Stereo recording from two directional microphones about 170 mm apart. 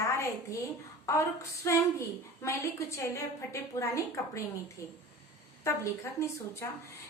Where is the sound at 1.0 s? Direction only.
15° left (ahead or behind).